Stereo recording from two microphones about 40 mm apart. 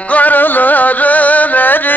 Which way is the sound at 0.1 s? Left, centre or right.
Left.